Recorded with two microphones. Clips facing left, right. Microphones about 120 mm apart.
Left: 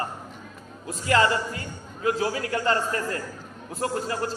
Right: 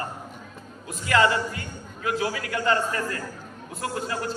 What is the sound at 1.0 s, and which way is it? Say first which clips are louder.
A man's voice: even; 30° left (ahead or behind).